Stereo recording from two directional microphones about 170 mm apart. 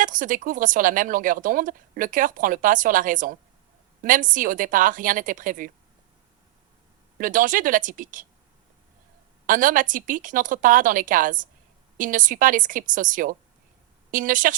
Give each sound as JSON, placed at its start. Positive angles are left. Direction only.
{"t": 0.0, "sound": "speech", "side_deg": -50}
{"t": 7.2, "sound": "speech", "side_deg": -50}
{"t": 9.5, "sound": "speech", "side_deg": -50}